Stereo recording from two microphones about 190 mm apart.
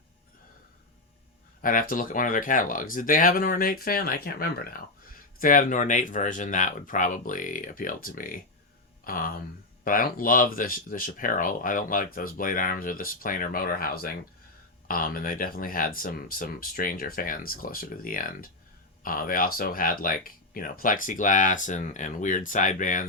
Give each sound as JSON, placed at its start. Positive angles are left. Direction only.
{"t": 1.6, "sound": "speech", "side_deg": 45}